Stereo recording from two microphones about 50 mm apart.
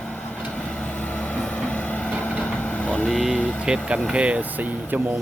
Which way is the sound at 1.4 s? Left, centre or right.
Left.